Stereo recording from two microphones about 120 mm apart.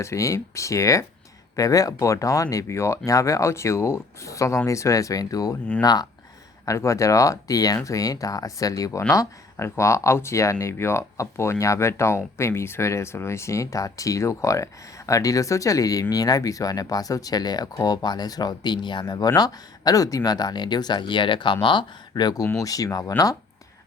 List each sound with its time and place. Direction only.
0.0 s speech: 25° left (ahead or behind)